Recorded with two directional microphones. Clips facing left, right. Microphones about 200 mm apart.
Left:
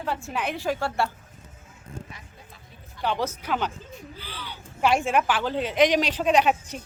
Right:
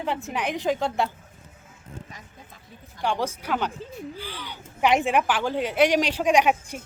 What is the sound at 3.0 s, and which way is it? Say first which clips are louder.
Speech: right 1 dB; 10° right (ahead or behind).